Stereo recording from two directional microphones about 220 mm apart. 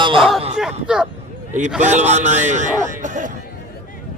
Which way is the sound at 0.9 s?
5° right (ahead or behind).